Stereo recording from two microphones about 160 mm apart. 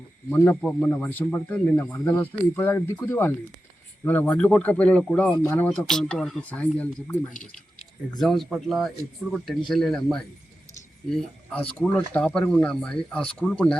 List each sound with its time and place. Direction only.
0.3 s speech: 15° left (ahead or behind)
8.2 s speech: centre (ahead or behind)